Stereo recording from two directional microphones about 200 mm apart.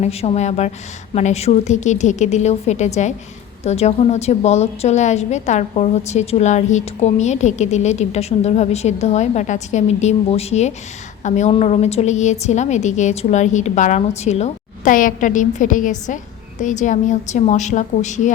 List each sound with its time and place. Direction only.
0.0 s a woman's voice: 30° left (ahead or behind)